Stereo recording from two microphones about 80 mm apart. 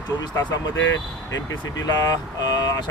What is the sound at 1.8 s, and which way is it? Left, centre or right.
Speech, left.